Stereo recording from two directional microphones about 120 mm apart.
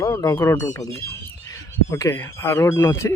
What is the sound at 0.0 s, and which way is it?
Speech, 25° left (ahead or behind).